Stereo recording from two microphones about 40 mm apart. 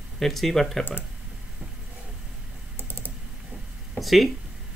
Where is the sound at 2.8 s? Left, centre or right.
Left.